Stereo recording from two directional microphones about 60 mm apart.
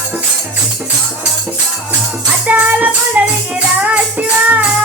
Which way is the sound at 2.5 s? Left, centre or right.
Right.